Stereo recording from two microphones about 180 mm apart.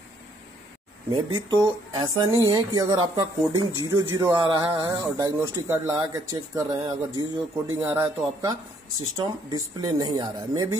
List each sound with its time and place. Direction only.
1.3 s speech: 25° right (ahead or behind)